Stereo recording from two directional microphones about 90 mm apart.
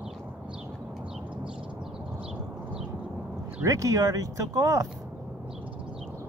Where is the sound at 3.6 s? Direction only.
35° right (ahead or behind).